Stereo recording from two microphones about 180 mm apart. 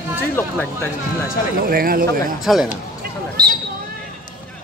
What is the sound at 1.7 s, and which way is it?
Speech, 55° right (ahead or behind).